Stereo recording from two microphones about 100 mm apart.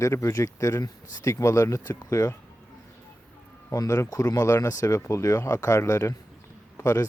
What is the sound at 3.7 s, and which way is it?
Speech, 30° left (ahead or behind).